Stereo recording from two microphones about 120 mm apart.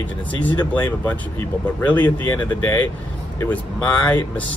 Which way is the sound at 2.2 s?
20° left (ahead or behind).